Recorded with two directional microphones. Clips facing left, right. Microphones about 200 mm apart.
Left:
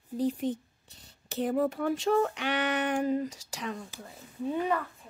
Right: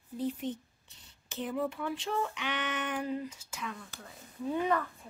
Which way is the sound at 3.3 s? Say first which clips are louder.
Left 4 dB; 85° left.